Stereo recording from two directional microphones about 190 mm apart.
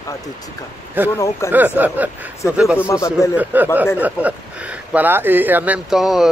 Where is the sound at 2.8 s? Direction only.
15° left (ahead or behind).